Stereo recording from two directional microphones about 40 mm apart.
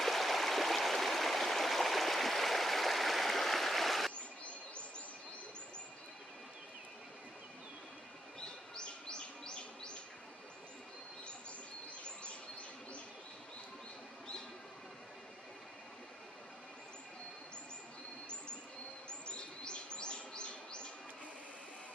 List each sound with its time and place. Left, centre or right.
0.0 s stream: centre
8.4 s bird: left
19.0 s bird: left